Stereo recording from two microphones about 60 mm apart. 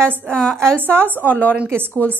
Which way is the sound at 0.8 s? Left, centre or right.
Right.